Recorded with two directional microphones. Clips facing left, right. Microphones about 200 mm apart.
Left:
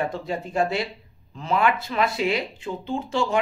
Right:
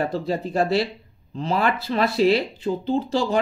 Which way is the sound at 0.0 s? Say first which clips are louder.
Right 3 dB; 35° right (ahead or behind).